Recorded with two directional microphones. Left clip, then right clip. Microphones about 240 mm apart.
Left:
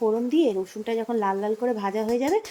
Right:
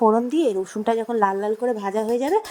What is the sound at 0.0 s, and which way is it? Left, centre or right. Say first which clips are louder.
A woman's voice: right 4 dB; right.